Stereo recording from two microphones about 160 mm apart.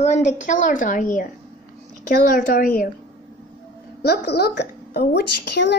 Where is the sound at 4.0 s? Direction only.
90° left.